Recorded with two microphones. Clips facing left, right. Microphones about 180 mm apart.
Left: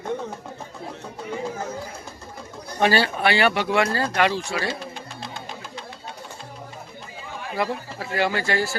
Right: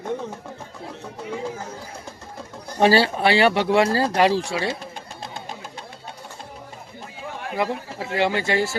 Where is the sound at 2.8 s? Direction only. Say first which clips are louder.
Right 3 dB; 30° right (ahead or behind).